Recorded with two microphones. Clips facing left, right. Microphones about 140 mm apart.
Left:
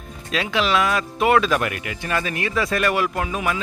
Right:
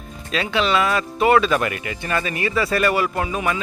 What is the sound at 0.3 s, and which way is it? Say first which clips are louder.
A man's voice: right 1 dB; centre (ahead or behind).